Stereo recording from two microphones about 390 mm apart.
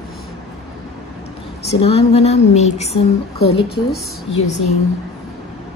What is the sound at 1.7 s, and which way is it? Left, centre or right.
A woman's voice, centre.